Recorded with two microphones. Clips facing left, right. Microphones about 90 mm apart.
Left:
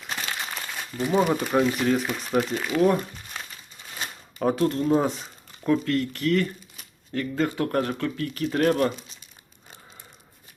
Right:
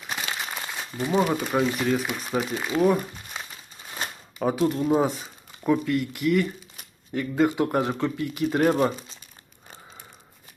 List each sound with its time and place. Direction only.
0.1 s crumpling: 15° right (ahead or behind)
0.9 s speech: centre (ahead or behind); by 8.9 s 15° right (ahead or behind)